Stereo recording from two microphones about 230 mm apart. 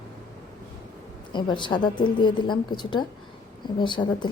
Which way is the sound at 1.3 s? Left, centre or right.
Left.